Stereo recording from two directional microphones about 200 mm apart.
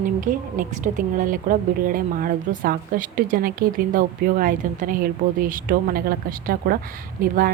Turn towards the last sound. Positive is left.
turn(degrees=-45)  # may be behind; listen again after turning